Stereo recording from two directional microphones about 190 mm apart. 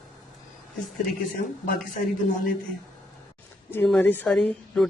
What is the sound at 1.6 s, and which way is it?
Speech, 50° left (ahead or behind).